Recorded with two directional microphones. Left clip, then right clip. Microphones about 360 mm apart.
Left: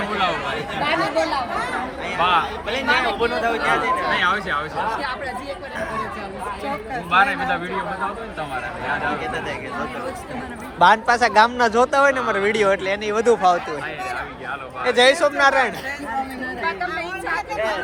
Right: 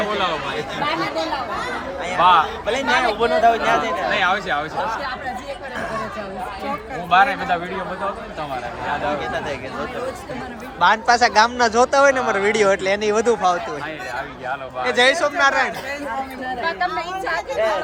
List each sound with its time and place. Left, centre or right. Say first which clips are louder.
2.0 s a man's voice: right 5 dB; right
7.1 s a man's voice: right 2 dB; right
9.2 s speech: right 1 dB; right
10.8 s speech: even; centre
14.8 s speech: left 1 dB; centre
16.6 s a sound: right 2 dB; right